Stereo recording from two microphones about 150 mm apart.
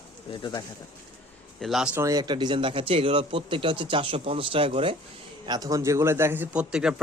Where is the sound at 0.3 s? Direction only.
30° left (ahead or behind).